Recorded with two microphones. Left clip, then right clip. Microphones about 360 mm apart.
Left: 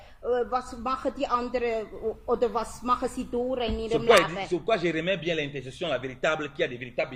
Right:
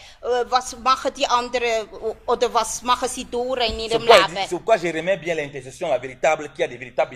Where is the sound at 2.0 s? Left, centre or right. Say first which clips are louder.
Right 4 dB; right.